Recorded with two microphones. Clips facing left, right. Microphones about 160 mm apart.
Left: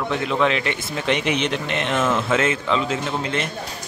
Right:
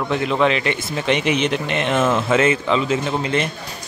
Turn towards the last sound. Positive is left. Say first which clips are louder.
# right 4 dB
turn(degrees=-5)  # may be behind; listen again after turning